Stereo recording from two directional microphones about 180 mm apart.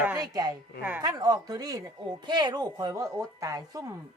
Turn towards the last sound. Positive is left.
turn(degrees=-20)  # may be behind; listen again after turning